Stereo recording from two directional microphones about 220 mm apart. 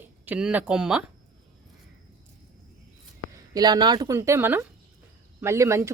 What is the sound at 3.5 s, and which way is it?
A woman's voice, 20° right (ahead or behind).